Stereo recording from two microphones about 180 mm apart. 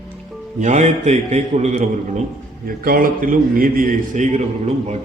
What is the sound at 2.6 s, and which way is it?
A man's voice, 55° right (ahead or behind).